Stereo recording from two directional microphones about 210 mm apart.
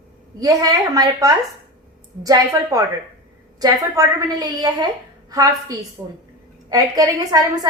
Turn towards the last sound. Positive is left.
turn(degrees=-15)  # may be behind; listen again after turning